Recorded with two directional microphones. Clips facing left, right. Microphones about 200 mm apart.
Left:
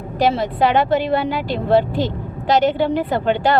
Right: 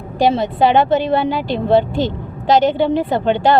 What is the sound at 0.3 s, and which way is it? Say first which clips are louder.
Speech: right 3 dB; 25° right (ahead or behind).